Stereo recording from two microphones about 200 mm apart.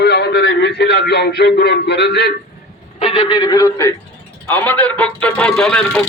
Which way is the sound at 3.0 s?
25° left (ahead or behind).